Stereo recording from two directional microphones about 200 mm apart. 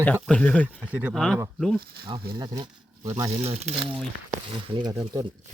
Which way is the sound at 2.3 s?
20° right (ahead or behind).